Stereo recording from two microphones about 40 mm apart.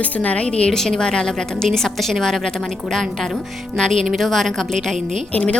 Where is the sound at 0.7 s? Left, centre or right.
Centre.